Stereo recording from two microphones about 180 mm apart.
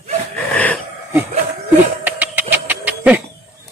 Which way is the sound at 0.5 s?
10° left (ahead or behind).